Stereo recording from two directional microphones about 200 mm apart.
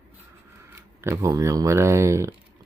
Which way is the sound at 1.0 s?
15° right (ahead or behind).